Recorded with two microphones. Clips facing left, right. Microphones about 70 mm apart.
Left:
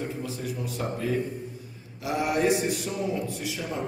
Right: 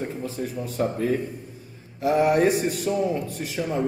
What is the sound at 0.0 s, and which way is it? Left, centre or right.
A man's voice, right.